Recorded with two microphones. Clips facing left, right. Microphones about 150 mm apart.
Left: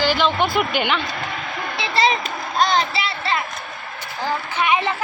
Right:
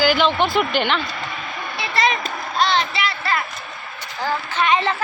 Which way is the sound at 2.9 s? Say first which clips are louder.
Even; 25° left (ahead or behind).